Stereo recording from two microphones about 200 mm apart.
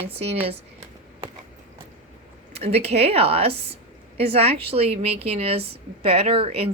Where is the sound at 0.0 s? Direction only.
30° right (ahead or behind).